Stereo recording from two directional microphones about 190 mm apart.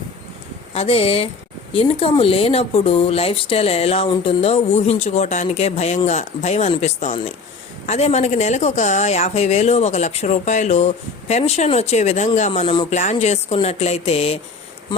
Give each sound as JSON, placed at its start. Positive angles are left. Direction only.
{"t": 0.7, "sound": "speech", "side_deg": 30}
{"t": 12.9, "sound": "speech", "side_deg": 35}